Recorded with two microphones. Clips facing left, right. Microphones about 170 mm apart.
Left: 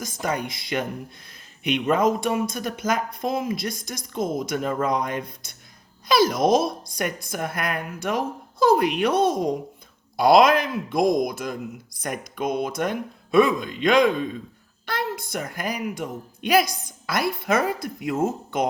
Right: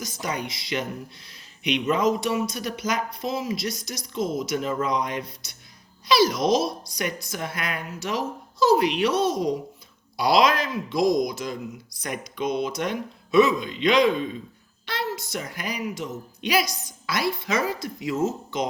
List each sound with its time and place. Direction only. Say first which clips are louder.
0.0 s a woman's voice: left 3 dB; 50° left (ahead or behind)